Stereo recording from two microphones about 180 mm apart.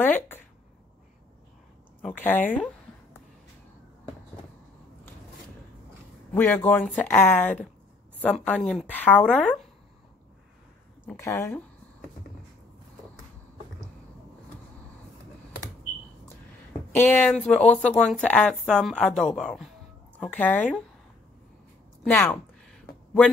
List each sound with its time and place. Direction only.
0.0 s a sound: 10° left (ahead or behind)
2.1 s speech: 10° left (ahead or behind)
6.3 s speech: 10° left (ahead or behind)
11.1 s speech: 15° left (ahead or behind)
16.9 s speech: 10° left (ahead or behind)
22.1 s a sound: 10° left (ahead or behind)